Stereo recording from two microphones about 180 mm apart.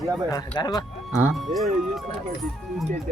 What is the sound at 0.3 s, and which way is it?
Speech, 20° left (ahead or behind).